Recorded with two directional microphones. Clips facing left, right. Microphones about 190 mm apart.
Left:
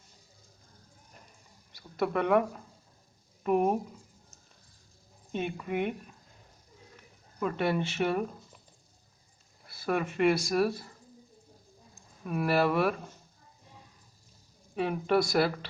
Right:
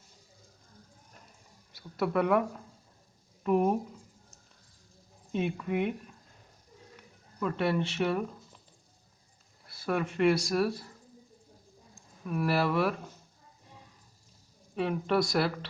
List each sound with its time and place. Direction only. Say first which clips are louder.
1.7 s speech: right 1 dB; 5° right (ahead or behind)
3.4 s speech: even; 5° left (ahead or behind)
5.3 s speech: right 2 dB; centre (ahead or behind)
7.3 s speech: even; 5° left (ahead or behind)
9.6 s speech: left 1 dB; centre (ahead or behind)
12.2 s speech: left 2 dB; 5° left (ahead or behind)
14.8 s speech: left 1 dB; 5° left (ahead or behind)